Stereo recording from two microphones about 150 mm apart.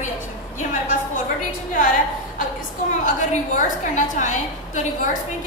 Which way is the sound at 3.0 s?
55° left (ahead or behind).